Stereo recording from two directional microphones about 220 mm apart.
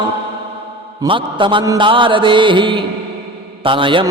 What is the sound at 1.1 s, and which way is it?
Mantra, 20° right (ahead or behind).